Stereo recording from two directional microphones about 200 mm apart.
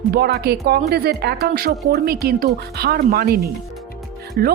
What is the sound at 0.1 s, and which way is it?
Speech, 55° right (ahead or behind).